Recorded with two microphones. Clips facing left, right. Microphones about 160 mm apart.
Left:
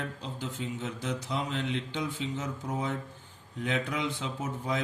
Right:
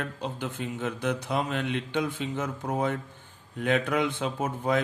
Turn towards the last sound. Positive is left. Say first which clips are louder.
# right 6 dB
turn(degrees=-60)  # may be behind; listen again after turning